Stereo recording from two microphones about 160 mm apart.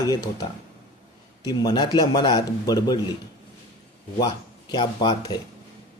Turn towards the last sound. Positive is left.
turn(degrees=30)  # may be behind; listen again after turning